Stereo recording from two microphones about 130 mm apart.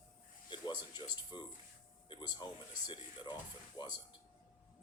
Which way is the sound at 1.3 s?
35° left (ahead or behind).